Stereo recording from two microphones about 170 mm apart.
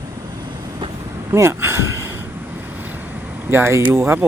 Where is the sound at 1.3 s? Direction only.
15° right (ahead or behind).